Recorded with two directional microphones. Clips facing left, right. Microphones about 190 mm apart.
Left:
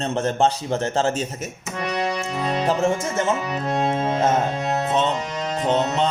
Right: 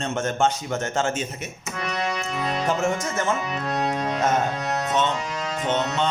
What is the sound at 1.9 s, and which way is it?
Music, 30° left (ahead or behind).